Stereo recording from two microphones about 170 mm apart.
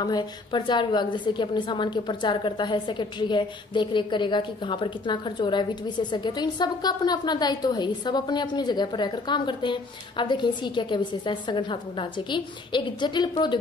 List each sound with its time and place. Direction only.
0.0 s a woman's voice: 25° left (ahead or behind)